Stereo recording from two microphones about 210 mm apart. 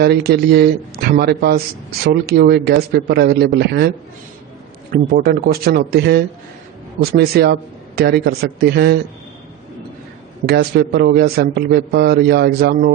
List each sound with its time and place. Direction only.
0.0 s a man's voice: 50° right (ahead or behind)
10.4 s a man's voice: 50° right (ahead or behind)